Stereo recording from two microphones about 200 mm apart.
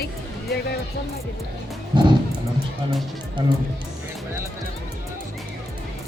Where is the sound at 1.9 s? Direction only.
20° right (ahead or behind).